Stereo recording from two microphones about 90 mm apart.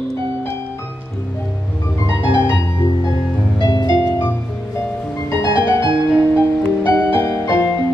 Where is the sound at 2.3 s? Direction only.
65° right (ahead or behind).